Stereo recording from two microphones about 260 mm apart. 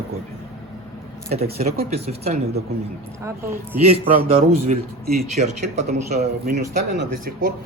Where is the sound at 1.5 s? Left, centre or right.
Right.